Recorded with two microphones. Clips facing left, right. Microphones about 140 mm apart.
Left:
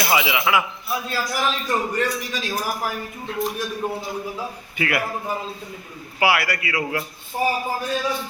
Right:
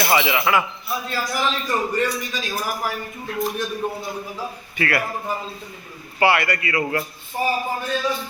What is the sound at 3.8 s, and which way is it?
Speech, 5° left (ahead or behind).